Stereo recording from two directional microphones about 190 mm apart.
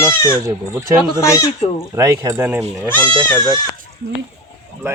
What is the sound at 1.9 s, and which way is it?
Speech, 15° right (ahead or behind).